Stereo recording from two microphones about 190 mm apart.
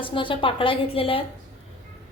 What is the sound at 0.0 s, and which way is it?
A woman's voice, 25° left (ahead or behind).